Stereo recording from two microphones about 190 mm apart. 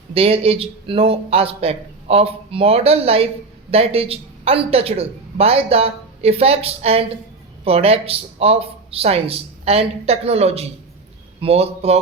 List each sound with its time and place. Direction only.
0.1 s speech: 30° right (ahead or behind)